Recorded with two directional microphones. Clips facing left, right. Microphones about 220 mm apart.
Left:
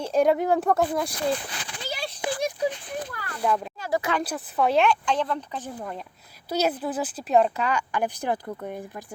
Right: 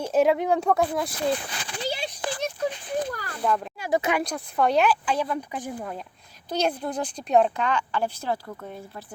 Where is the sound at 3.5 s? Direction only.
5° left (ahead or behind).